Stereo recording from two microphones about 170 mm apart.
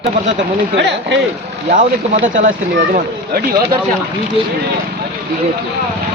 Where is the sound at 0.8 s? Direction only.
90° right.